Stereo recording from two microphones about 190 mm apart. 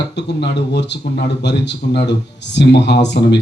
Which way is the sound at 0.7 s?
60° left (ahead or behind).